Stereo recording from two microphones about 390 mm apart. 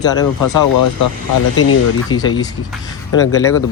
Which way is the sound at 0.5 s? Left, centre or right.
Left.